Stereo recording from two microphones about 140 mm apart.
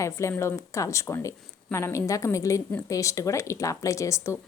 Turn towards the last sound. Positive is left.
turn(degrees=20)  # may be behind; listen again after turning